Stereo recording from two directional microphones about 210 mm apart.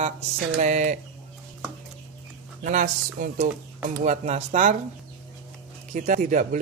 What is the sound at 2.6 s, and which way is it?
Speech, 40° right (ahead or behind).